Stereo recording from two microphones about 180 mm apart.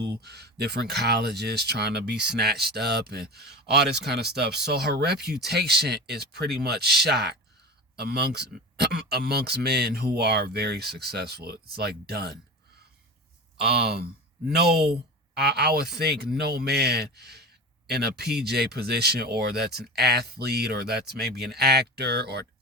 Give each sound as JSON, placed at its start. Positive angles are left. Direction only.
{"t": 0.0, "sound": "speech", "side_deg": -65}
{"t": 13.6, "sound": "speech", "side_deg": -60}